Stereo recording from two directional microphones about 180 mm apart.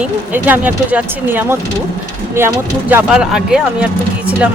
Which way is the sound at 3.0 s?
Centre (ahead or behind).